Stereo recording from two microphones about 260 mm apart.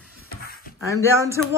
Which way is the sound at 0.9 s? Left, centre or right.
Centre.